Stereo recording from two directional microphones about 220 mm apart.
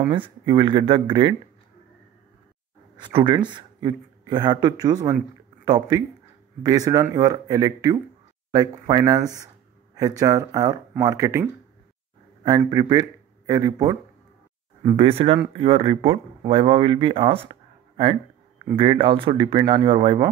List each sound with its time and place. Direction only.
0.1 s speech: 20° right (ahead or behind)
3.0 s speech: 20° right (ahead or behind)
12.4 s speech: 20° right (ahead or behind)